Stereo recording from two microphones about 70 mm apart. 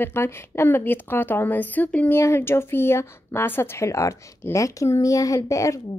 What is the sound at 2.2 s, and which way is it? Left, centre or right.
A woman's voice, left.